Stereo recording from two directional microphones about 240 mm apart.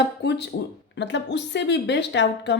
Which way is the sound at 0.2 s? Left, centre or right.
Left.